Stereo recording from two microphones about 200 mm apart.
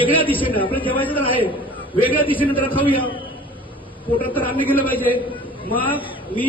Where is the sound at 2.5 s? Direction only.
25° left (ahead or behind).